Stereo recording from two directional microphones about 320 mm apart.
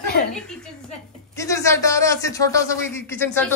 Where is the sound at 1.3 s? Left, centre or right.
Centre.